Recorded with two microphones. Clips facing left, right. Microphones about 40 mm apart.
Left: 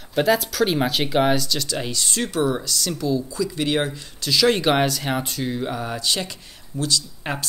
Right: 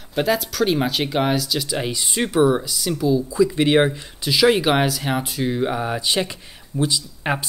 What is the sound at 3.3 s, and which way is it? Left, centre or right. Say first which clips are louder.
Speech: right 6 dB; right.